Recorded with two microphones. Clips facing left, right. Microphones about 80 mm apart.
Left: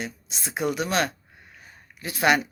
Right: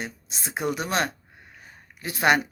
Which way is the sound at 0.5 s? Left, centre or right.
Right.